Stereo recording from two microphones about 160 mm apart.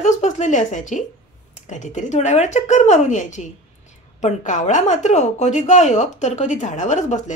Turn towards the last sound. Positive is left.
turn(degrees=50)  # may be behind; listen again after turning